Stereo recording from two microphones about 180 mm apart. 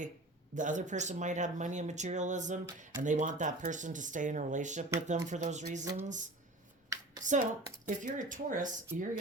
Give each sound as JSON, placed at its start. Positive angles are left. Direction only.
{"t": 0.5, "sound": "speech", "side_deg": -45}
{"t": 5.8, "sound": "a sound", "side_deg": -20}
{"t": 7.2, "sound": "speech", "side_deg": -45}